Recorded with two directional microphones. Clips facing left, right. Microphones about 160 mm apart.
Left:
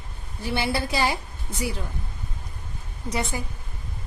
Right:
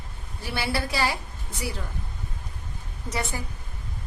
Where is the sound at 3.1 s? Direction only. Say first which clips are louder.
Left 2 dB; 15° left (ahead or behind).